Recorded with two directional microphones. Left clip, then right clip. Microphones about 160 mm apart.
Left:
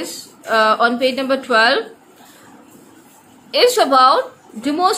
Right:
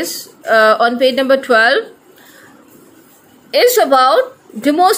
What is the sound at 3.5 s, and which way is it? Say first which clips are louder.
A woman's voice: right 3 dB; 35° right (ahead or behind).